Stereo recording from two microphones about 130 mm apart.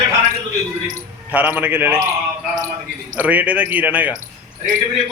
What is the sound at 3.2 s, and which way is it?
Speech, 10° right (ahead or behind).